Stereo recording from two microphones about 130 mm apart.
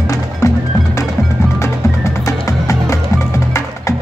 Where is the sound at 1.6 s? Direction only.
20° left (ahead or behind).